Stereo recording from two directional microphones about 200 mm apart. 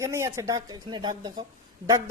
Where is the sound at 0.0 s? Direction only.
15° right (ahead or behind).